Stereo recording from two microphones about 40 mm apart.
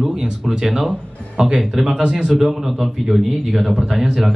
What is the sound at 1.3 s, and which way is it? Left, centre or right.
Speech, right.